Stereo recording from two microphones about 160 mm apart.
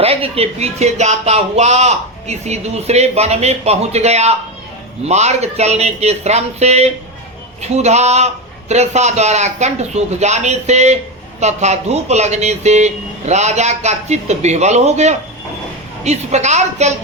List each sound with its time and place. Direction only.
0.0 s speech: 35° right (ahead or behind)